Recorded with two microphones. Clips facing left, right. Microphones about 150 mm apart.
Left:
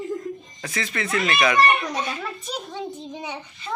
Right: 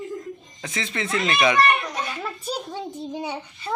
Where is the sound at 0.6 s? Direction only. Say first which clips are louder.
Even; 20° right (ahead or behind).